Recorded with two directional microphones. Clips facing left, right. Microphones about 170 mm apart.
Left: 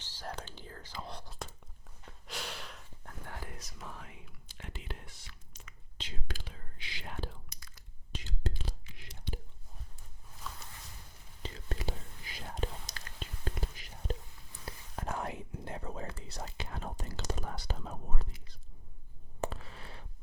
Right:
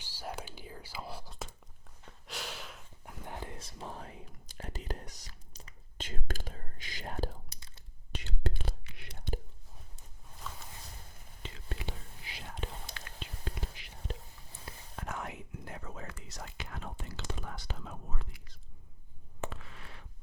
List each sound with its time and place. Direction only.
0.0 s speech: 10° right (ahead or behind)
2.0 s gasp: centre (ahead or behind); by 6.1 s 35° right (ahead or behind)
6.1 s whispering: 50° right (ahead or behind)
8.1 s whispering: 65° right (ahead or behind)
10.5 s a sound: centre (ahead or behind)
11.4 s whispering: 40° left (ahead or behind)
19.4 s a sound: 35° left (ahead or behind)